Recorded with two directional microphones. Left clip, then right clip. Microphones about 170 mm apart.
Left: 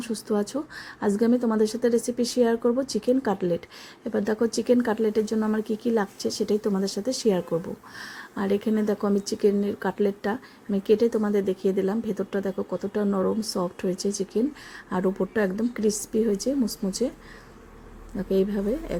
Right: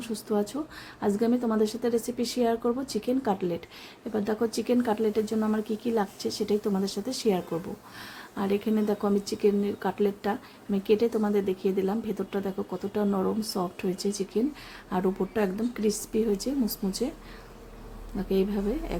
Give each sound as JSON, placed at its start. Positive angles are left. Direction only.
{"t": 0.0, "sound": "speech", "side_deg": 25}
{"t": 18.3, "sound": "speech", "side_deg": 20}